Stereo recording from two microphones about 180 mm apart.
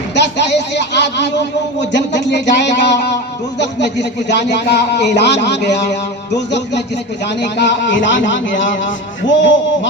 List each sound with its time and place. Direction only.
0.1 s a man's voice: 70° left (ahead or behind); by 9.6 s 90° left